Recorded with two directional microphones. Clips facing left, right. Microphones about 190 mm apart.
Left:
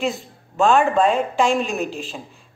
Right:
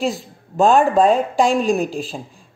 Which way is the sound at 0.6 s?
40° right (ahead or behind).